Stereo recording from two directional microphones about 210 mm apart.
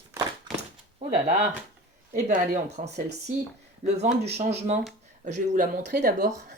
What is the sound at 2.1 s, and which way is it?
Speech, 35° right (ahead or behind).